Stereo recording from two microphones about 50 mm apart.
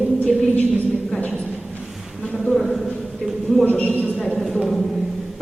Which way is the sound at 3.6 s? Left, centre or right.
Left.